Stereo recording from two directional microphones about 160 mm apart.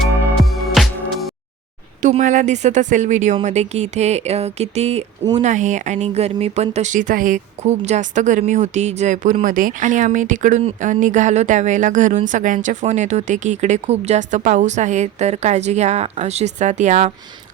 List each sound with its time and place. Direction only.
0.5 s music: centre (ahead or behind)
2.0 s speech: 50° right (ahead or behind)